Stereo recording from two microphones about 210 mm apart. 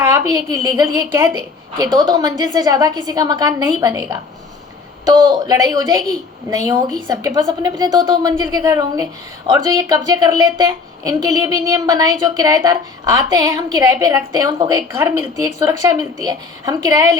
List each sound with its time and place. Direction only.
0.0 s a woman's voice: 15° right (ahead or behind)
7.1 s a woman's voice: 15° right (ahead or behind)